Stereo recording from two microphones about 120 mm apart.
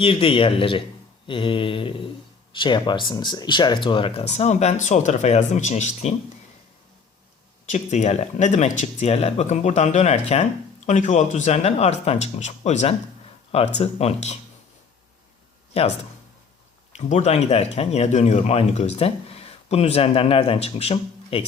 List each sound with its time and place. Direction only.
0.0 s speech: 50° left (ahead or behind); by 6.1 s 70° left (ahead or behind)
7.7 s speech: 75° left (ahead or behind)
10.8 s speech: 80° left
13.5 s speech: 55° left (ahead or behind)
15.7 s speech: 60° left (ahead or behind)
16.9 s speech: 70° left (ahead or behind); by 21.4 s 55° left (ahead or behind)